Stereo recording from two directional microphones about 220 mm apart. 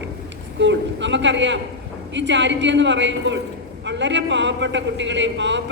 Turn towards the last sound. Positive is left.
turn(degrees=-55)  # may be behind; listen again after turning